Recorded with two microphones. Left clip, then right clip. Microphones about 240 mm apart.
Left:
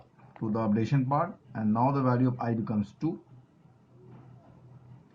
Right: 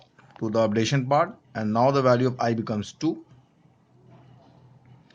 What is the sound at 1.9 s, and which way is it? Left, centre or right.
Speech, right.